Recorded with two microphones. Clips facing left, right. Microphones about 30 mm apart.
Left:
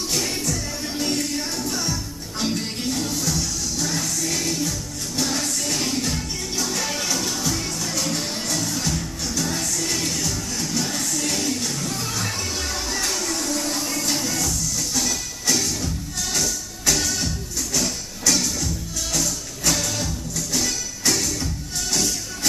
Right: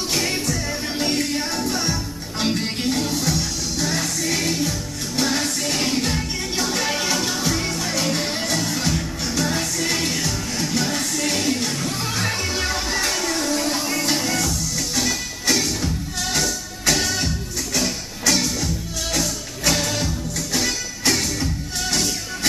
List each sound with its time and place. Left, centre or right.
0.1 s music: right